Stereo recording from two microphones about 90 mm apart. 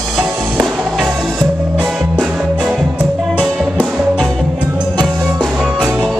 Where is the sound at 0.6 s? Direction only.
Centre (ahead or behind).